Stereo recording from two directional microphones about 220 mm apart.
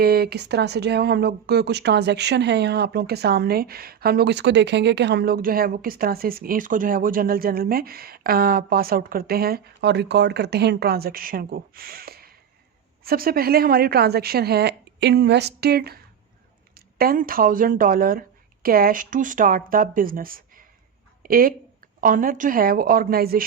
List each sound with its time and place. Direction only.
0.0 s a woman's voice: 45° right (ahead or behind)